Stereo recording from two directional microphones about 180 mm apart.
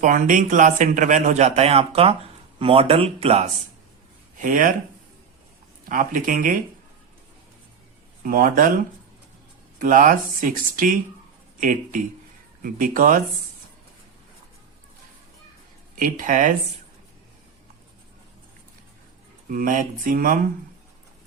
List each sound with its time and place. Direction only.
0.0 s a man's voice: 45° right (ahead or behind)
4.4 s speech: 45° right (ahead or behind)
5.9 s a man's voice: 45° right (ahead or behind)
8.2 s a man's voice: 50° right (ahead or behind)
16.0 s a man's voice: 50° right (ahead or behind)
19.5 s a man's voice: 50° right (ahead or behind)